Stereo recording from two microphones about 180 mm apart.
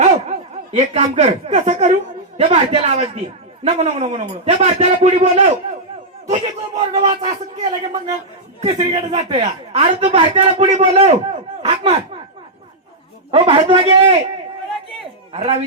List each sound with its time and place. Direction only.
0.0 s a man's voice: 40° right (ahead or behind)
8.6 s a man's voice: 35° right (ahead or behind)
13.3 s a man's voice: 30° right (ahead or behind)
15.3 s speech: 35° right (ahead or behind)